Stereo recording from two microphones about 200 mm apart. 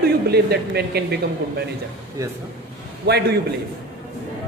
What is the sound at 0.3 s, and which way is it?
Speech, 55° right (ahead or behind).